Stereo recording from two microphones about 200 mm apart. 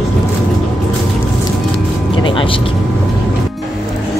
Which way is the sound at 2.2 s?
25° left (ahead or behind).